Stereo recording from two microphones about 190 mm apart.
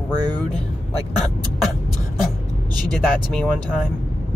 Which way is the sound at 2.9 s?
5° left (ahead or behind).